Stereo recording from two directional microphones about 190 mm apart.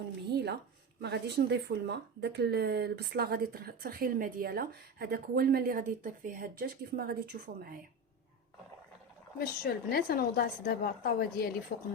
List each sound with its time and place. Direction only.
0.3 s speech: 60° right (ahead or behind)
9.4 s a woman's voice: 55° left (ahead or behind)